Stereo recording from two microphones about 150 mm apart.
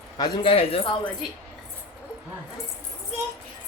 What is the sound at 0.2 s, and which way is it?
Speech, 35° left (ahead or behind).